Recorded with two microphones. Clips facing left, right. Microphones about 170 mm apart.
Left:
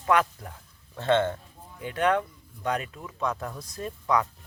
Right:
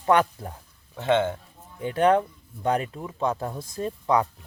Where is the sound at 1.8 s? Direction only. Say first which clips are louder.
Right 5 dB; 30° right (ahead or behind).